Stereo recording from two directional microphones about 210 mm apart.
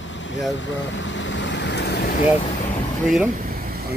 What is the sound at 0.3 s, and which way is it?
Vehicle, 60° left (ahead or behind).